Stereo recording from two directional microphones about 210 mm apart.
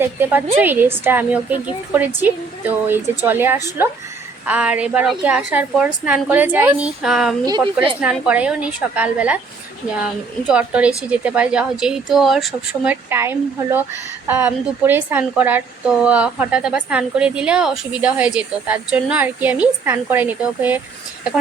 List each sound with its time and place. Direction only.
0.0 s a woman's voice: 10° right (ahead or behind)
7.4 s speech: 20° right (ahead or behind)
8.0 s a woman's voice: 5° right (ahead or behind)